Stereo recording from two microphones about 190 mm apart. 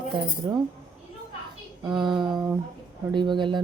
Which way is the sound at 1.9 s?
25° right (ahead or behind).